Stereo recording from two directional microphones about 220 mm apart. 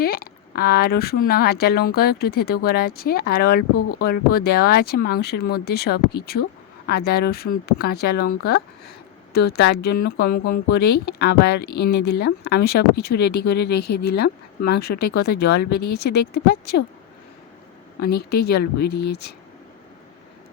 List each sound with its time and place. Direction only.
0.0 s speech: 45° left (ahead or behind)
3.8 s speech: 90° left
4.0 s speech: 45° left (ahead or behind)
18.0 s speech: 45° left (ahead or behind)